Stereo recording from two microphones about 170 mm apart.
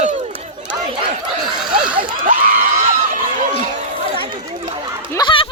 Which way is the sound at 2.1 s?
55° right (ahead or behind).